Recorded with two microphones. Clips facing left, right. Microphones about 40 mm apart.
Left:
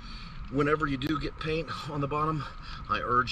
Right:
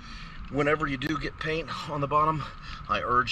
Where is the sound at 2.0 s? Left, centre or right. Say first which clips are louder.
Right 5 dB; right.